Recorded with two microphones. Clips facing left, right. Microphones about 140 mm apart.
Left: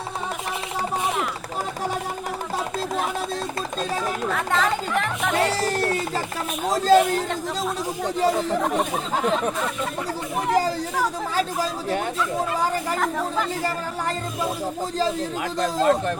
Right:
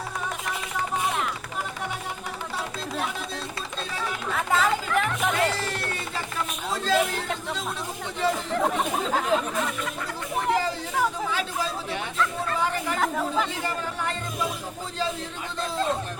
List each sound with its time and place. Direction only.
4.3 s speech: 5° right (ahead or behind)
5.4 s speech: 40° left (ahead or behind)
8.5 s speech: centre (ahead or behind)
10.5 s speech: 40° left (ahead or behind)
13.0 s speech: centre (ahead or behind)
15.6 s speech: 90° left